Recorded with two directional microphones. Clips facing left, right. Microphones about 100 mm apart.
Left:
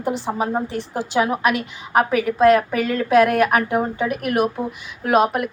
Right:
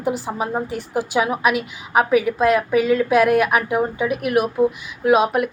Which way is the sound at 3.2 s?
40° left (ahead or behind).